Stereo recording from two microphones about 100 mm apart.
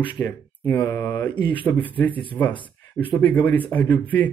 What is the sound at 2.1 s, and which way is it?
Speech, 60° left (ahead or behind).